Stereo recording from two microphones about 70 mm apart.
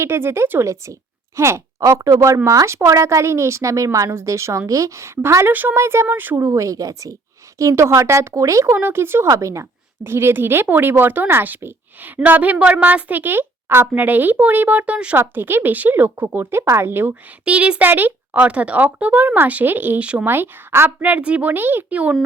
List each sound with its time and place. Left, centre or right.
0.0 s speech: right
0.6 s speech: right
1.9 s speech: right
6.4 s speech: right
8.7 s speech: right
9.3 s speech: right
10.0 s a woman's voice: right
17.4 s a woman's voice: centre; by 20.9 s right
21.0 s a woman's voice: centre